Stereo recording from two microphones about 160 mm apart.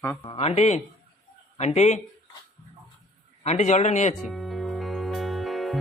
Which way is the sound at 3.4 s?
45° left (ahead or behind).